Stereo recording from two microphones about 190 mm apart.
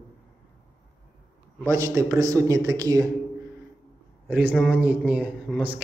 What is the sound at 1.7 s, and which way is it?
A man's voice, 15° right (ahead or behind).